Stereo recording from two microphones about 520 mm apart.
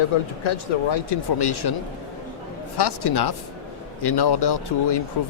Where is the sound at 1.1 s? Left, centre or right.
Left.